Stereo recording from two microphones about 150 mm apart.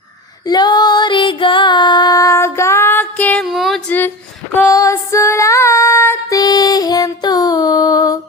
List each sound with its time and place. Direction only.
0.4 s female singing: 30° left (ahead or behind); by 3.4 s 10° left (ahead or behind)
3.4 s female singing: centre (ahead or behind)
3.8 s a sound: 10° left (ahead or behind)
4.5 s female singing: 15° left (ahead or behind)